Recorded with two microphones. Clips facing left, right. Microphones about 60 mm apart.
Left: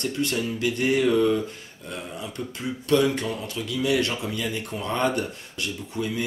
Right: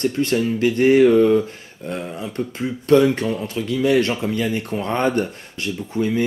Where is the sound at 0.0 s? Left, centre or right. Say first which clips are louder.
Right 7 dB; right.